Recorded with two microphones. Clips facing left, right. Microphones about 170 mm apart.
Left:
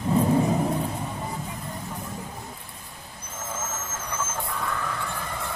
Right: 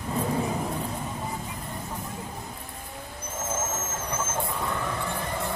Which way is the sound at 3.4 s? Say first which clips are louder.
Right 3 dB; 25° right (ahead or behind).